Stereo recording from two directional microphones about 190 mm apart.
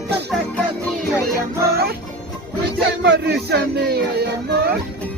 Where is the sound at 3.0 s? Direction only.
60° right (ahead or behind).